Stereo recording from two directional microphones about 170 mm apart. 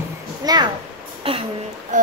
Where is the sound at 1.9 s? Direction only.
50° right (ahead or behind).